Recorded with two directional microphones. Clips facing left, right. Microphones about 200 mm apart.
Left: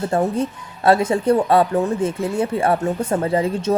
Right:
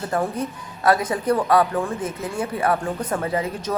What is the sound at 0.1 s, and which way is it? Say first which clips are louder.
Speech: left 2 dB; 25° left (ahead or behind).